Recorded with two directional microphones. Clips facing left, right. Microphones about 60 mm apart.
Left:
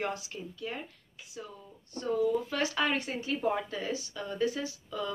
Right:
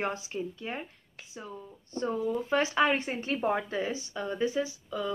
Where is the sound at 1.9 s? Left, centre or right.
Right.